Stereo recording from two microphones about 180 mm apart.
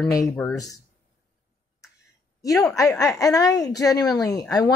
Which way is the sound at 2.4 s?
20° left (ahead or behind).